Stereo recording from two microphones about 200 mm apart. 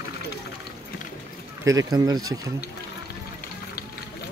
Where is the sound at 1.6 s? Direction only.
20° right (ahead or behind).